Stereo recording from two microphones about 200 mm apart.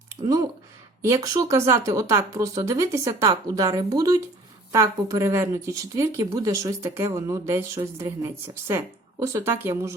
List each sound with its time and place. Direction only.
1.0 s speech: 15° right (ahead or behind)
9.2 s speech: 15° right (ahead or behind)